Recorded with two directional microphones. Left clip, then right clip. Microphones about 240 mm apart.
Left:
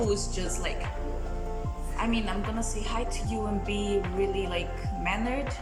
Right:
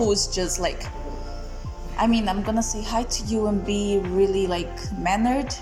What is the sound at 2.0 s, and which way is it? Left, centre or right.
A woman's voice, right.